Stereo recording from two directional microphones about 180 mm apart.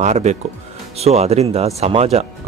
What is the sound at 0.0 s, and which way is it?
Speech, 40° right (ahead or behind).